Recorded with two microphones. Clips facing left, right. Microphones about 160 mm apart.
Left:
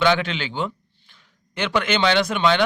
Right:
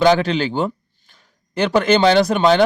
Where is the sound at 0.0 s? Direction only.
40° right (ahead or behind).